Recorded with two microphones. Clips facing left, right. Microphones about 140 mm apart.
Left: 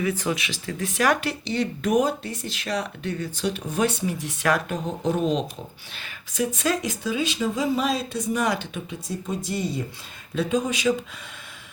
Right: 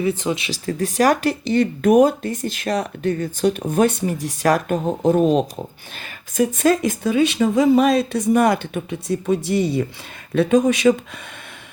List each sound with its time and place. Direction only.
0.0 s speech: 25° right (ahead or behind); by 10.9 s 60° right (ahead or behind)